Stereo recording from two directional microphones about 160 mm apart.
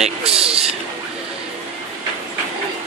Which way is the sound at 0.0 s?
5° right (ahead or behind).